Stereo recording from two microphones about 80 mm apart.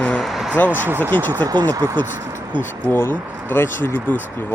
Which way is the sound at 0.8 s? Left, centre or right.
Right.